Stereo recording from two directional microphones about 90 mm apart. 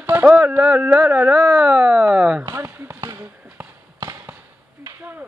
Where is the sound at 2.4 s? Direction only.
30° right (ahead or behind).